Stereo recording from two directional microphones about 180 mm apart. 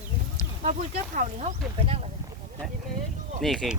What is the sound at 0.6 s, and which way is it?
Speech, 45° right (ahead or behind).